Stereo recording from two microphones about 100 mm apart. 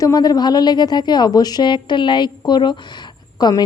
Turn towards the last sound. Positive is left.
turn(degrees=40)  # may be behind; listen again after turning